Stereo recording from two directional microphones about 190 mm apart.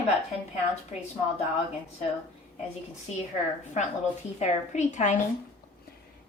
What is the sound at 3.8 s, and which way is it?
A woman's voice, 40° left (ahead or behind).